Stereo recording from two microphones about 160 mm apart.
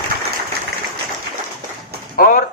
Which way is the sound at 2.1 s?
60° left (ahead or behind).